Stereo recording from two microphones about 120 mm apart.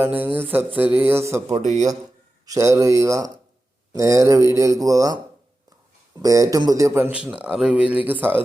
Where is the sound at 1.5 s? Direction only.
80° right.